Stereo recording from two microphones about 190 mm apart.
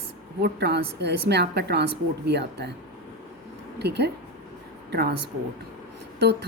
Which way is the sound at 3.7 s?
60° right (ahead or behind).